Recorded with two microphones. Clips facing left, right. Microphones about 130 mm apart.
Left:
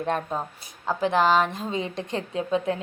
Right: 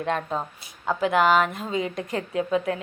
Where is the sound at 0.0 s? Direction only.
10° left (ahead or behind).